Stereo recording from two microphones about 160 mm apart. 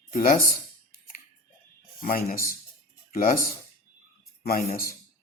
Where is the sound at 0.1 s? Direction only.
60° left (ahead or behind).